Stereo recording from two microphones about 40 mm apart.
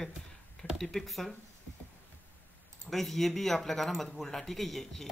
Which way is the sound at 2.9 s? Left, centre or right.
Centre.